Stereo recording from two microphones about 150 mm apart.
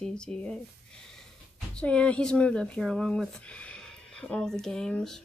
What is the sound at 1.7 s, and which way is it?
Speech, 5° left (ahead or behind).